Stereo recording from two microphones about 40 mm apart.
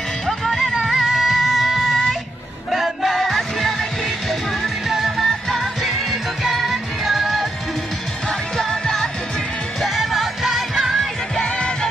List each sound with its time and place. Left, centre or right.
0.3 s music: centre
4.8 s music: centre
8.3 s music: centre
9.8 s music: centre
11.5 s music: left